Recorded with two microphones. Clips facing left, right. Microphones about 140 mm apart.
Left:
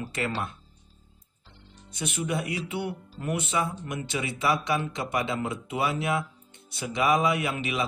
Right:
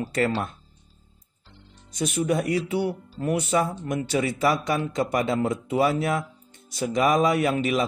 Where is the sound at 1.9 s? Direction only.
40° right (ahead or behind).